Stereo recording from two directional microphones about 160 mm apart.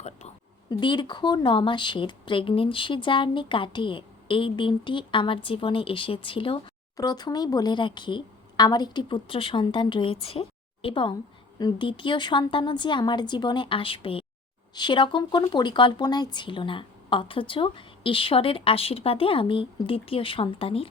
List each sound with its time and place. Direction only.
0.7 s speech: 30° left (ahead or behind)